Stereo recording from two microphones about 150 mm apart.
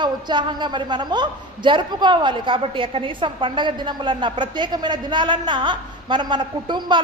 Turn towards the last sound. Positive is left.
turn(degrees=-30)  # may be behind; listen again after turning